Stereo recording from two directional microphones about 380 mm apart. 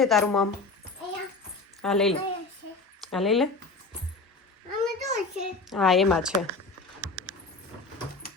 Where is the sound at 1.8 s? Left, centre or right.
Centre.